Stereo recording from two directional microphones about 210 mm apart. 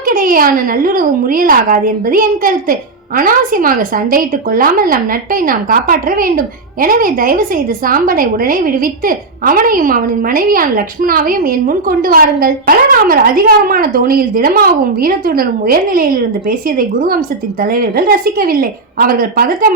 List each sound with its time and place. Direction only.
0.0 s a woman's voice: 40° right (ahead or behind)